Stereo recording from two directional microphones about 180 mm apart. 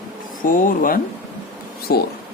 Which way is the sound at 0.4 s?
50° left (ahead or behind).